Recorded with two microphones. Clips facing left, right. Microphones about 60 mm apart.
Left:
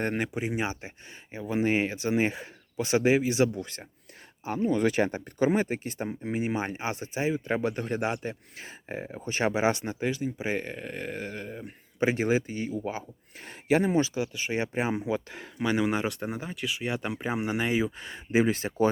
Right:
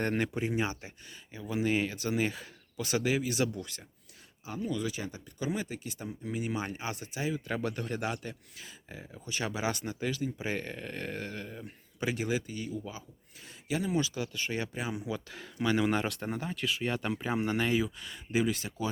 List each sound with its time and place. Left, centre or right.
0.0 s speech: centre; by 3.8 s left
4.4 s speech: left
4.9 s speech: left
14.0 s speech: left
15.6 s speech: centre
17.9 s speech: left